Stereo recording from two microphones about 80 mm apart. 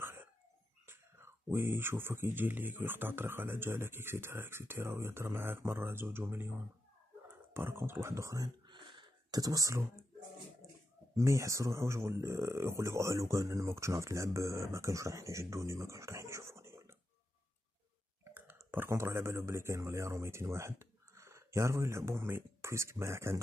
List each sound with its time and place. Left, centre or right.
0.0 s whispering: right
0.8 s speech: right
8.6 s a sound: right
11.1 s speech: right
18.2 s clicking: right
19.4 s speech: right